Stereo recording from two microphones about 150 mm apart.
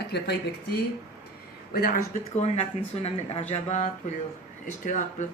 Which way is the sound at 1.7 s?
80° left.